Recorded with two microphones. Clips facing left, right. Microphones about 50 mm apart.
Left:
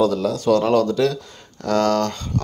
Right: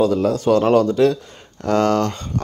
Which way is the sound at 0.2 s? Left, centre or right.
Right.